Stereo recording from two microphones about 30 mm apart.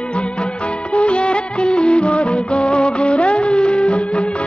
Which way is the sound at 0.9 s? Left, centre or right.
Left.